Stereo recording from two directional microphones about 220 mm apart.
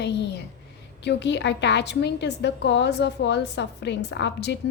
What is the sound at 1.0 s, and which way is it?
A woman's voice, 50° left (ahead or behind).